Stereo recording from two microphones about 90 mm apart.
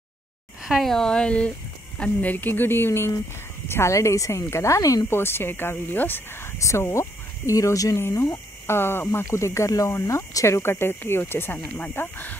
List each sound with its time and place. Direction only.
0.7 s a woman's voice: centre (ahead or behind); by 11.6 s 25° left (ahead or behind)
11.6 s speech: 15° left (ahead or behind)